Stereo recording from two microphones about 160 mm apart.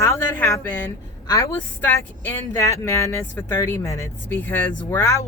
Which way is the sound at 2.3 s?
15° left (ahead or behind).